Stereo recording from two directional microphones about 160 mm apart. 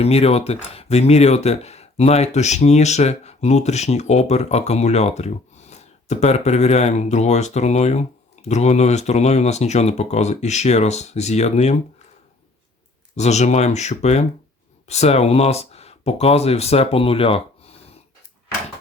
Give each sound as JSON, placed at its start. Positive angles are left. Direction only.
{"t": 0.0, "sound": "speech", "side_deg": 40}
{"t": 13.1, "sound": "speech", "side_deg": 45}